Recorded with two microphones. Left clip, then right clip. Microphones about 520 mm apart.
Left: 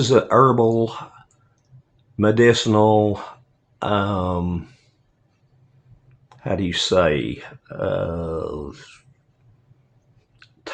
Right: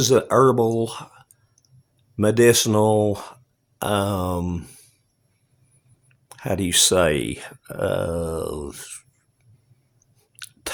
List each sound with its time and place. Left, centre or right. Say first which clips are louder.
0.0 s speech: left 1 dB; right
2.1 s speech: left 1 dB; right
6.2 s speech: left 1 dB; right
10.3 s chewing: right 9 dB; right